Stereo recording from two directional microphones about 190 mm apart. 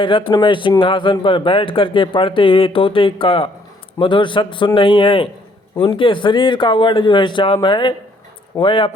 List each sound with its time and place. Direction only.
0.0 s speech: 25° left (ahead or behind)